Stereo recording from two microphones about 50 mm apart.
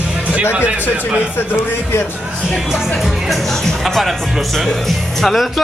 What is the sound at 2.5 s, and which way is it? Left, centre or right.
Speech, centre.